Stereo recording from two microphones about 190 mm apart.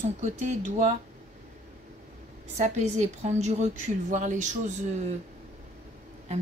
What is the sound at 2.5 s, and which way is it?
A woman's voice, 35° right (ahead or behind).